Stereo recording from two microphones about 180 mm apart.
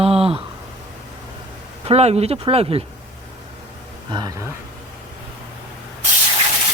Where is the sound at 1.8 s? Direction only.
35° right (ahead or behind).